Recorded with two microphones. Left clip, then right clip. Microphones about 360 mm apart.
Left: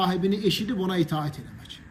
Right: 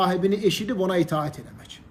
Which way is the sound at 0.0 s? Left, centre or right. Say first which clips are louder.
Right 3 dB; centre.